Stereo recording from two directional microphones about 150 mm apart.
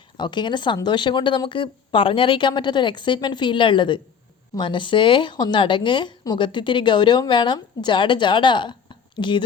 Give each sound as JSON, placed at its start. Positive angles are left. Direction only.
{"t": 0.2, "sound": "a woman's voice", "side_deg": 30}